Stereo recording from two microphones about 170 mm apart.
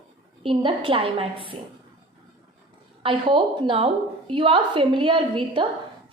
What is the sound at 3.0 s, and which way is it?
A woman's voice, 30° right (ahead or behind).